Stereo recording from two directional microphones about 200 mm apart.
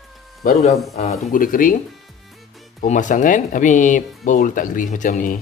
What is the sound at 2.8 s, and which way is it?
Speech, 40° left (ahead or behind).